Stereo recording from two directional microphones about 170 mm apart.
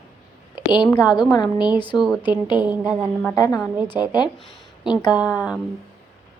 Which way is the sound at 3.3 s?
20° left (ahead or behind).